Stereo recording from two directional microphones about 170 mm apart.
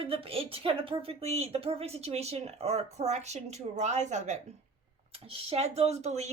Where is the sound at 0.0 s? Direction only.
35° right (ahead or behind).